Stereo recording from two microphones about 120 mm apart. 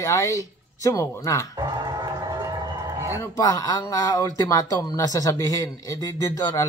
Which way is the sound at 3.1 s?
30° left (ahead or behind).